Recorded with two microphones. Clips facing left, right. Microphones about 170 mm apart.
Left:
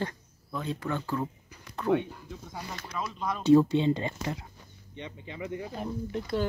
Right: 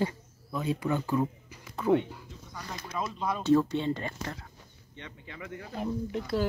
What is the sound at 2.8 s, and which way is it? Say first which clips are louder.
Speech: right 3 dB; 20° right (ahead or behind).